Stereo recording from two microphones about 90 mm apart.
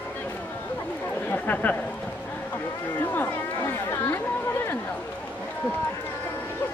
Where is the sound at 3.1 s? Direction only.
30° left (ahead or behind).